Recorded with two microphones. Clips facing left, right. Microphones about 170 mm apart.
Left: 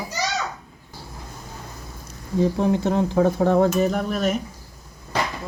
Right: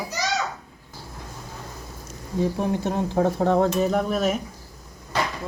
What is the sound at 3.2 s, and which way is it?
Speech, centre (ahead or behind).